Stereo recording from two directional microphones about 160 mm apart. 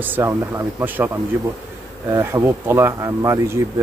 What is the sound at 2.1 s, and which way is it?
Speech, 15° right (ahead or behind).